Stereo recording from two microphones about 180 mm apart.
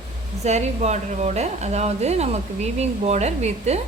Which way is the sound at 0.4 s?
40° right (ahead or behind).